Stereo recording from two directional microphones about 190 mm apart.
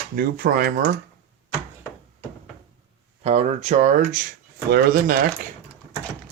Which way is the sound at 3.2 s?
35° right (ahead or behind).